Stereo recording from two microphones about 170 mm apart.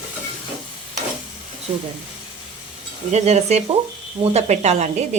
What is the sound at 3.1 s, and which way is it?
Speech, 40° right (ahead or behind).